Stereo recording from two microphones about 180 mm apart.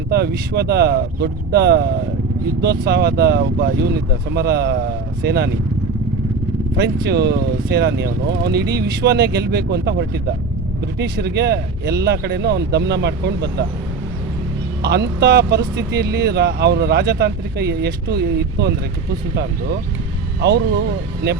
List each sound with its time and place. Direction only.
0.1 s speech: 65° right (ahead or behind)
6.7 s speech: 70° right (ahead or behind)
14.8 s speech: 65° right (ahead or behind)
20.4 s speech: 65° right (ahead or behind)